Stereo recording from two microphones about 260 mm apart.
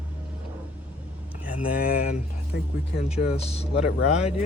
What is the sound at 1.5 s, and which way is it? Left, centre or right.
Speech, left.